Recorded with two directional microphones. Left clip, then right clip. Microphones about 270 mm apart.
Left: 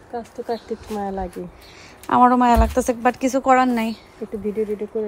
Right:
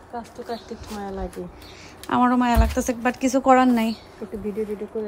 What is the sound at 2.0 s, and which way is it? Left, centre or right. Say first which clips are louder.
Speech: left 6 dB; centre.